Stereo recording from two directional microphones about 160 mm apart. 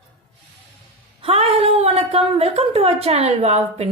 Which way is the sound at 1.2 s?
40° right (ahead or behind).